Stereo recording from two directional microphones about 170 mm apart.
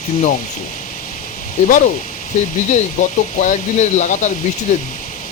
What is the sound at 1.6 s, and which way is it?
Speech, 50° left (ahead or behind).